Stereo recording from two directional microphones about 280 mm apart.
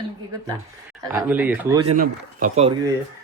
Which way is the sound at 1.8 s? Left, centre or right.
Right.